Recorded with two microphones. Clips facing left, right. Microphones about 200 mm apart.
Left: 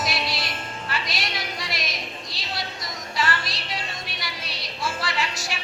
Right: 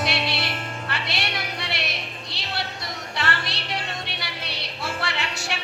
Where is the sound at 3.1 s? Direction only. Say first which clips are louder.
Left 2 dB; 65° right (ahead or behind).